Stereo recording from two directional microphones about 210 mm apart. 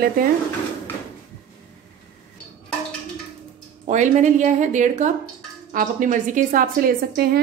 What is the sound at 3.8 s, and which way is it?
A woman's voice, 35° right (ahead or behind).